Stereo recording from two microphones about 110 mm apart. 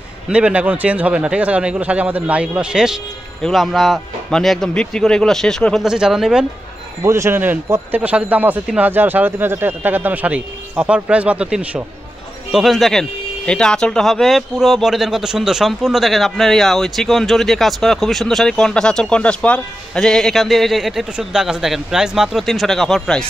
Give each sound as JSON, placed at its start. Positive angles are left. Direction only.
{"t": 0.3, "sound": "speech", "side_deg": -10}
{"t": 5.9, "sound": "speech", "side_deg": -5}
{"t": 7.0, "sound": "speech", "side_deg": -25}